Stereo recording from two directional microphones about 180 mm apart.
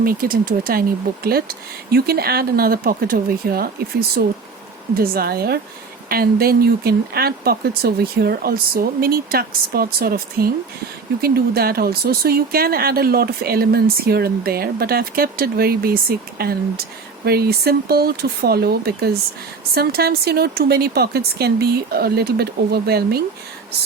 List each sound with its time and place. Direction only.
0.0 s speech: 55° right (ahead or behind)